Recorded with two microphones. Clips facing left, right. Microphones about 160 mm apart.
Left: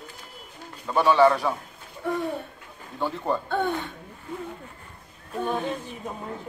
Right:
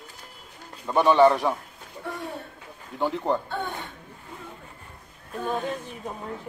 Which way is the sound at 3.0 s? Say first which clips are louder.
Right 2 dB; 15° right (ahead or behind).